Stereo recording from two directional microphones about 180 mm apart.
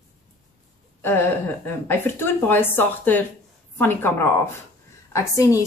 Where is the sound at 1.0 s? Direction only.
15° left (ahead or behind).